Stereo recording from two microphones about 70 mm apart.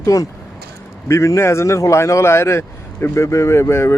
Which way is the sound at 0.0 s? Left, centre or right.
Left.